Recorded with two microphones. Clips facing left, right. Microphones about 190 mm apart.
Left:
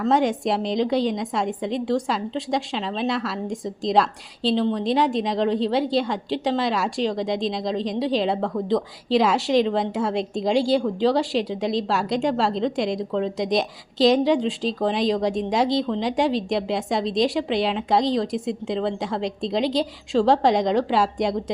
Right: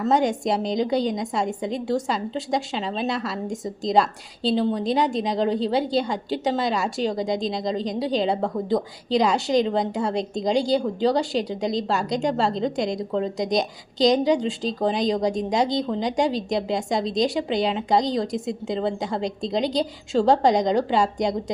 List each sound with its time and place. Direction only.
0.0 s a woman's voice: centre (ahead or behind)